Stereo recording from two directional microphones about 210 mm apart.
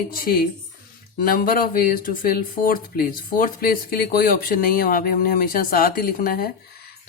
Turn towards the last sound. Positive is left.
turn(degrees=45)  # may be behind; listen again after turning